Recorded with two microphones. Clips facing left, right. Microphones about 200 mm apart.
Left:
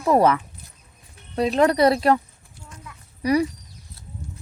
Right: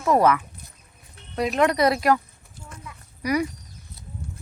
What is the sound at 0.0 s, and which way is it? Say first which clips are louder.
Speech: left 1 dB; 30° left (ahead or behind).